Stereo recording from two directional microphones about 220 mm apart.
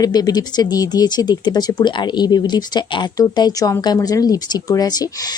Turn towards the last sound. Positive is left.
turn(degrees=15)  # may be behind; listen again after turning